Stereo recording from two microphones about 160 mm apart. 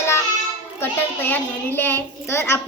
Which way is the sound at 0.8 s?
10° left (ahead or behind).